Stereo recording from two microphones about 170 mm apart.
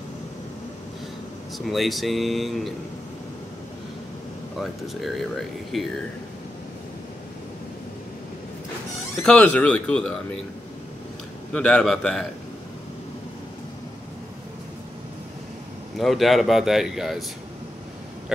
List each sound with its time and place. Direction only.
1.7 s speech: centre (ahead or behind)
4.6 s speech: centre (ahead or behind)
9.2 s speech: 5° left (ahead or behind)
11.5 s speech: 5° left (ahead or behind)
16.0 s speech: centre (ahead or behind)